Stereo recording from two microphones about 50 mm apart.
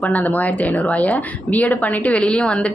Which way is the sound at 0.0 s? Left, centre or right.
Left.